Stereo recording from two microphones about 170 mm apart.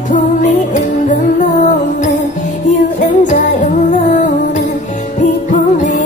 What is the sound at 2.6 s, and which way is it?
Music, 45° left (ahead or behind).